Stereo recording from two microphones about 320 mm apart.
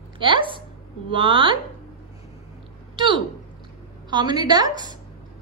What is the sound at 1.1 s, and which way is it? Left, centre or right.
Speech, centre.